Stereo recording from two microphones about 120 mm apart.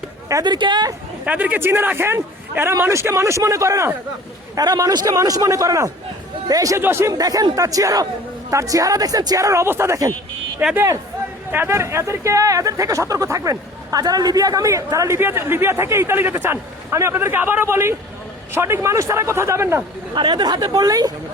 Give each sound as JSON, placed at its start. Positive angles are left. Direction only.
{"t": 0.4, "sound": "speech", "side_deg": -40}
{"t": 1.2, "sound": "speech", "side_deg": -15}
{"t": 20.1, "sound": "speech", "side_deg": -40}